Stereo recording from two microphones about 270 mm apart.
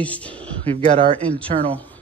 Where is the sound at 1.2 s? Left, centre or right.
Centre.